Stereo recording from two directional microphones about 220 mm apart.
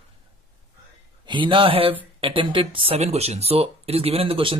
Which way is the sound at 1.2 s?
20° right (ahead or behind).